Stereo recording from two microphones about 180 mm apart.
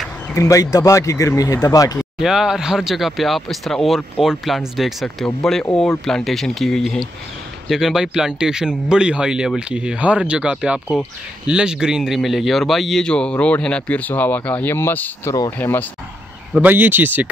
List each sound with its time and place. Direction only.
0.4 s speech: 20° left (ahead or behind)
2.0 s a man's voice: centre (ahead or behind)
16.5 s speech: 10° right (ahead or behind)